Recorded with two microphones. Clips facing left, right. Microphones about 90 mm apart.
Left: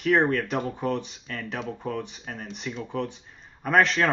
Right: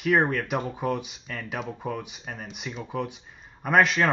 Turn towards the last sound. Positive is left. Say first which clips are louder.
# even
turn(degrees=-5)  # may be behind; listen again after turning